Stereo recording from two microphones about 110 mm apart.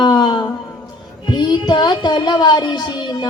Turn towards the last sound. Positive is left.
turn(degrees=40)  # may be behind; listen again after turning